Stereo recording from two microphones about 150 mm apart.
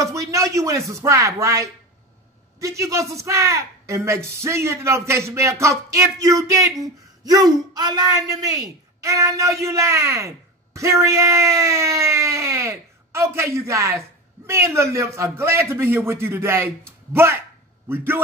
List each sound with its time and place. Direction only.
0.0 s a man's voice: 20° right (ahead or behind)